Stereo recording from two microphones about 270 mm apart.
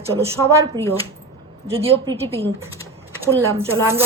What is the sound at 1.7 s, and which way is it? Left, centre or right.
Speech, right.